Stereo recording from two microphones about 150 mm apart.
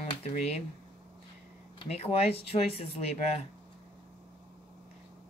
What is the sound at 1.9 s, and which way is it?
Speech, 45° left (ahead or behind).